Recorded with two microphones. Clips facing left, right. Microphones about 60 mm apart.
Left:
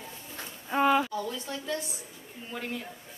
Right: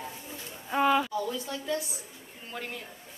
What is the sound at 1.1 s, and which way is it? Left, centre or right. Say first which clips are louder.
Speech: right 2 dB; centre.